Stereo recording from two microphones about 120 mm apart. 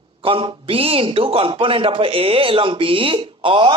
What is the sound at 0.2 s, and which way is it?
A man's voice, 50° right (ahead or behind).